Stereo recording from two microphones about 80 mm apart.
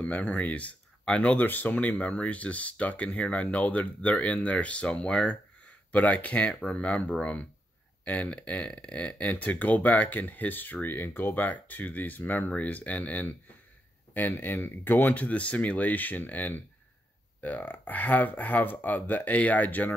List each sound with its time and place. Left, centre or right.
0.0 s speech: centre